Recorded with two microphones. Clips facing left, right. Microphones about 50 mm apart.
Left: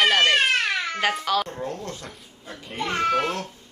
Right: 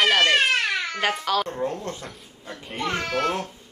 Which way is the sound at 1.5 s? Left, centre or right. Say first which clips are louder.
Right 3 dB; right.